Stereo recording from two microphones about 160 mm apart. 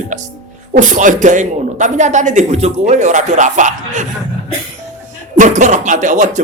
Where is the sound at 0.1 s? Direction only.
50° right (ahead or behind).